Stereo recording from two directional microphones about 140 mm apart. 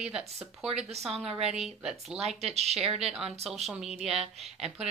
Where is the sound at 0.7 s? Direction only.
50° right (ahead or behind).